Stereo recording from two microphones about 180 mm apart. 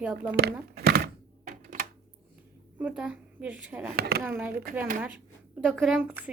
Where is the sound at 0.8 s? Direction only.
60° right (ahead or behind).